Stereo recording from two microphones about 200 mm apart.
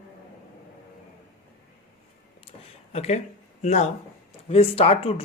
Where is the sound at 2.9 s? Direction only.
30° left (ahead or behind).